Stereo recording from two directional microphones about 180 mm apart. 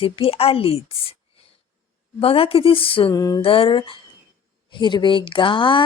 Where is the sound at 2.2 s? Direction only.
30° left (ahead or behind).